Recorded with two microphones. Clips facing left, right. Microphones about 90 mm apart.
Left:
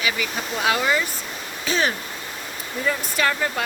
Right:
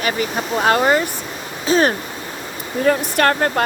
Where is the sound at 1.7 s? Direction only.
40° right (ahead or behind).